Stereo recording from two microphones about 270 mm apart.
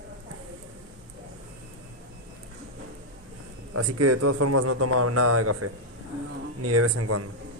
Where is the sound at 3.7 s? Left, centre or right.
Right.